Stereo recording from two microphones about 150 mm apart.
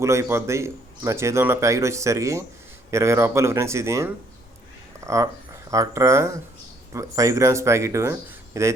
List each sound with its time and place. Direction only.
0.0 s speech: 20° right (ahead or behind)
4.9 s a sound: 20° right (ahead or behind)
5.7 s speech: 20° right (ahead or behind)